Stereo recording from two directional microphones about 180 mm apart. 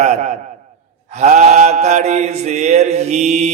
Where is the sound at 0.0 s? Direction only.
40° right (ahead or behind).